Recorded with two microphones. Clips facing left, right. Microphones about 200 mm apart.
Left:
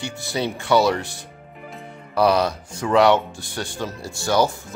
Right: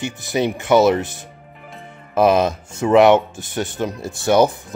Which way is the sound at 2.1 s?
20° right (ahead or behind).